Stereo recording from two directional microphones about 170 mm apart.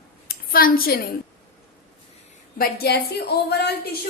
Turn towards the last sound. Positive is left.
turn(degrees=75)  # may be behind; listen again after turning